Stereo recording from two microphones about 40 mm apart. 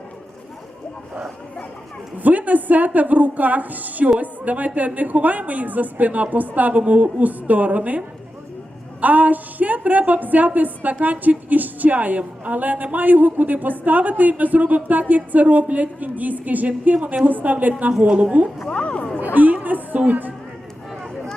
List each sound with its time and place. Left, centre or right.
2.1 s a woman's voice: right
18.6 s speech: left
19.2 s a sound: right
20.1 s a woman's voice: right